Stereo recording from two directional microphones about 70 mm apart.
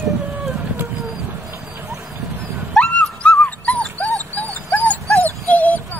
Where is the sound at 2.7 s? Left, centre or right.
Centre.